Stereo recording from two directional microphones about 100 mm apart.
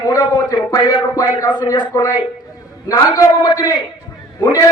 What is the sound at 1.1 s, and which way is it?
Speech, 35° left (ahead or behind).